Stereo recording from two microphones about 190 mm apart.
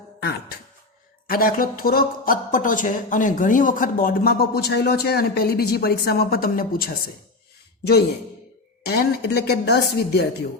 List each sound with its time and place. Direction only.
0.2 s speech: 60° left (ahead or behind)
8.9 s a woman's voice: 55° left (ahead or behind)